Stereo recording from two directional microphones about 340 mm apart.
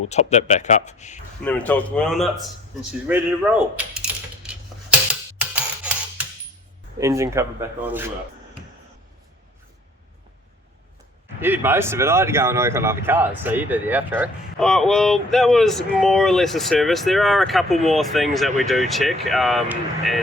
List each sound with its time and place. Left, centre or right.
0.1 s speech: centre
1.5 s speech: centre
5.4 s a sound: centre
7.0 s speech: centre
11.3 s speech: centre